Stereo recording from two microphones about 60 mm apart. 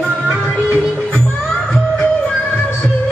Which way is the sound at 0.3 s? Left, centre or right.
Right.